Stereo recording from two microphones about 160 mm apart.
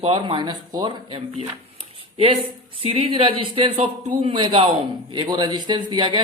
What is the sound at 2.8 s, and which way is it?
A man's voice, 35° right (ahead or behind).